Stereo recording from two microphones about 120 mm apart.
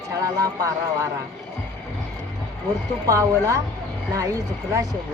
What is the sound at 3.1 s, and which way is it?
A man's voice, 25° right (ahead or behind).